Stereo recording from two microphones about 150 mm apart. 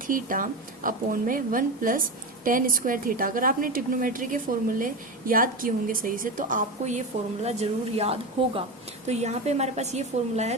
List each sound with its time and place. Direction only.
0.1 s a woman's voice: 65° right (ahead or behind)
7.4 s a woman's voice: 45° right (ahead or behind)